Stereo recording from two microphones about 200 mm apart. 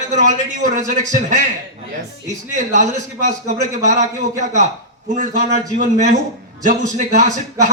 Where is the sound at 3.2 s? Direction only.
40° right (ahead or behind).